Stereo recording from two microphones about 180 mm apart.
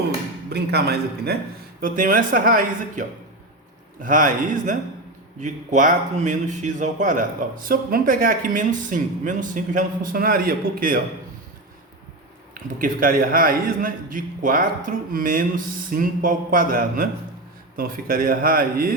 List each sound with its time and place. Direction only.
0.5 s a woman's voice: 65° right (ahead or behind)
1.8 s speech: 50° right (ahead or behind)
12.5 s speech: 50° right (ahead or behind)